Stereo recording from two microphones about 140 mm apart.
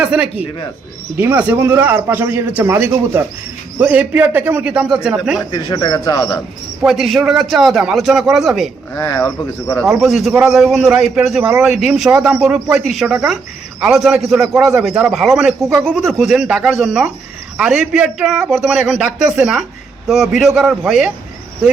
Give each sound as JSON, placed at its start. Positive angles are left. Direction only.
{"t": 0.0, "sound": "a man's voice", "side_deg": -10}
{"t": 5.5, "sound": "speech", "side_deg": 30}
{"t": 6.8, "sound": "a man's voice", "side_deg": 0}
{"t": 9.0, "sound": "speech", "side_deg": 20}
{"t": 9.4, "sound": "speech", "side_deg": 10}
{"t": 9.9, "sound": "a man's voice", "side_deg": 0}
{"t": 12.8, "sound": "a man's voice", "side_deg": 0}